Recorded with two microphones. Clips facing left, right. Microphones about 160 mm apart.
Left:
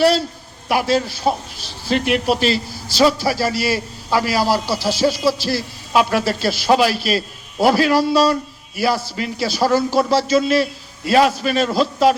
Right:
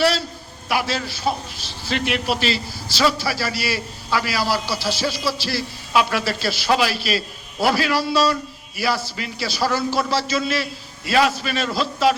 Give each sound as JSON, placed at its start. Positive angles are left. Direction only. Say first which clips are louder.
{"t": 0.7, "sound": "a man's voice", "louder": "left 6 dB", "side_deg": 45}